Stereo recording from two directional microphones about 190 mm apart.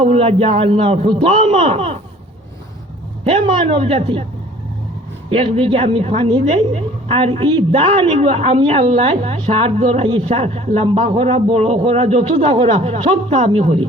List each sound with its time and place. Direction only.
0.0 s a woman's voice: 30° right (ahead or behind)
3.2 s a man's voice: 30° right (ahead or behind)
5.3 s a woman's voice: 30° right (ahead or behind)